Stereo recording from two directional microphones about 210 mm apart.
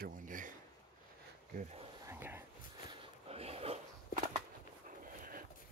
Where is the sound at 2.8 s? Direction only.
30° right (ahead or behind).